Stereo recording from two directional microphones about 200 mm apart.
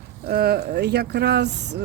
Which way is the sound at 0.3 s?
50° right (ahead or behind).